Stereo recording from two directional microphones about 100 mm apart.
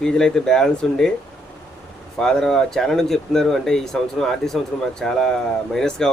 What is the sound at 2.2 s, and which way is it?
Speech, 5° left (ahead or behind).